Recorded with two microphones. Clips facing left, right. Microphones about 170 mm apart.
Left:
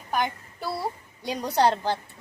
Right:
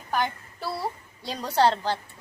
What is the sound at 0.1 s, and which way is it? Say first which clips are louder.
A child's voice: even; 15° left (ahead or behind).